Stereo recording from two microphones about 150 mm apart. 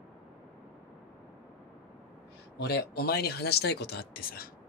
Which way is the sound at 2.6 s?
90° left.